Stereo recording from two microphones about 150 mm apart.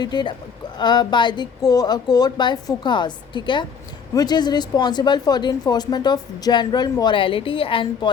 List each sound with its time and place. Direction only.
0.0 s a woman's voice: 30° left (ahead or behind)